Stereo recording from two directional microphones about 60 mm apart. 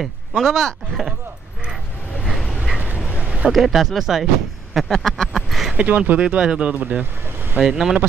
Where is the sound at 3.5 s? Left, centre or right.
Centre.